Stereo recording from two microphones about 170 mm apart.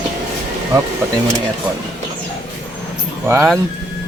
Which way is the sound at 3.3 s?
15° right (ahead or behind).